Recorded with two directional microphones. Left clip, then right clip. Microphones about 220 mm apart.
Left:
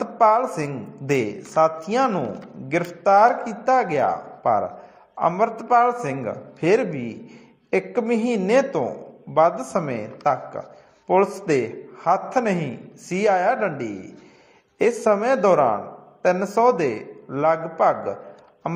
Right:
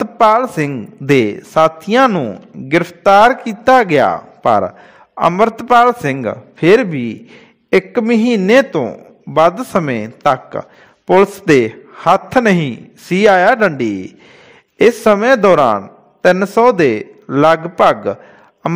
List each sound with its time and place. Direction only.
0.2 s a man's voice: 55° right (ahead or behind)
16.9 s a man's voice: 55° right (ahead or behind)